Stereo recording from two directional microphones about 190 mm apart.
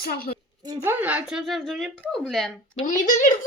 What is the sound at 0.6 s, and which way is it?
Speech, 15° right (ahead or behind).